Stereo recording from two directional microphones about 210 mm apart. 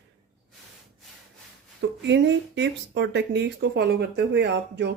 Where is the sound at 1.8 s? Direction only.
60° right (ahead or behind).